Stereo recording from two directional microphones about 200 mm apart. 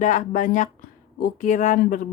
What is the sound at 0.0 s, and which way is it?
Speech, 40° left (ahead or behind).